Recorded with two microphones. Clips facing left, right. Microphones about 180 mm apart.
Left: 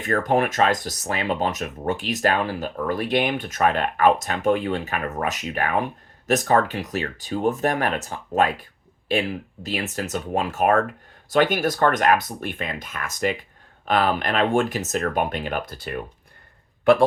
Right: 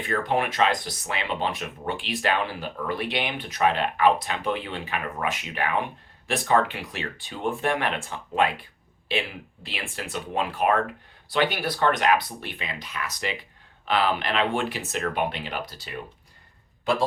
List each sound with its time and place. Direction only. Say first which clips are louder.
0.0 s a man's voice: left 4 dB; 45° left (ahead or behind); by 17.1 s 60° left (ahead or behind)